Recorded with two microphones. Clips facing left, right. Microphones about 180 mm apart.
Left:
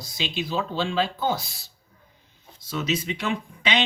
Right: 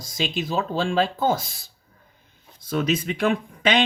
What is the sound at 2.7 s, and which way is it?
Speech, 55° right (ahead or behind).